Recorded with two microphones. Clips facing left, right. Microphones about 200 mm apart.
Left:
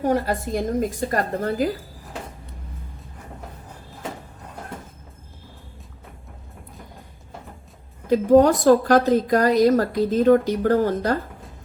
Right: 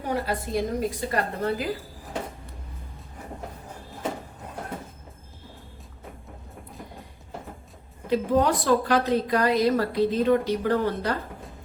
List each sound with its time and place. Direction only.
0.3 s a woman's voice: 50° left (ahead or behind)
8.1 s a woman's voice: 45° left (ahead or behind)